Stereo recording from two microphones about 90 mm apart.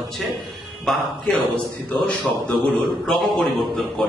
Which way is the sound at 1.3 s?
15° left (ahead or behind).